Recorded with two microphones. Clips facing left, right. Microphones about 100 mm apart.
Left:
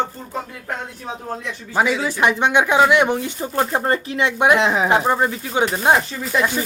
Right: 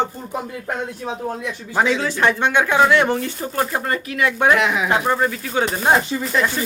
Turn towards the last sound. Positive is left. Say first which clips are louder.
# even
turn(degrees=15)  # may be behind; listen again after turning